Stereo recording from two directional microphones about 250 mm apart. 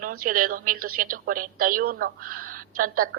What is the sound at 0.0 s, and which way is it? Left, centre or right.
A woman's voice, right.